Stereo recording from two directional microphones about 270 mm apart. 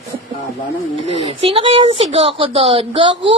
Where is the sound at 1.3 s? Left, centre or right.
Centre.